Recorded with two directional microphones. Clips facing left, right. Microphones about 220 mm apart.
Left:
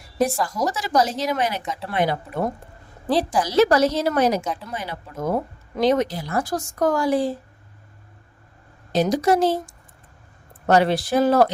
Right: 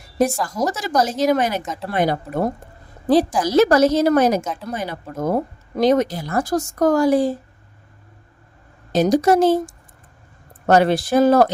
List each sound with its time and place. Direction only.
0.5 s speech: 45° right (ahead or behind)
8.9 s speech: 45° right (ahead or behind)
10.7 s speech: 45° right (ahead or behind)